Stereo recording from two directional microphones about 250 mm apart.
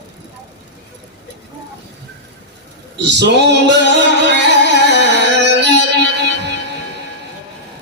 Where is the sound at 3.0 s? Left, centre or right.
Right.